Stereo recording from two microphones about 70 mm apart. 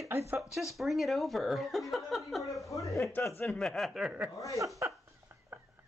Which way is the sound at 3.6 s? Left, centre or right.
Centre.